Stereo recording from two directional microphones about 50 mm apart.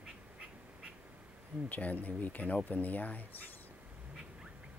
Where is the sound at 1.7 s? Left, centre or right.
Left.